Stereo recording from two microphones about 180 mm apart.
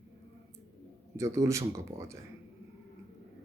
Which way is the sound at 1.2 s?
15° right (ahead or behind).